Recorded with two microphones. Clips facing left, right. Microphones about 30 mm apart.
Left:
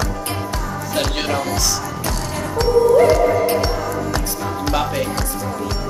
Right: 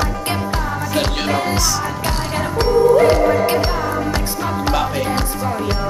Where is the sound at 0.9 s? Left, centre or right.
Centre.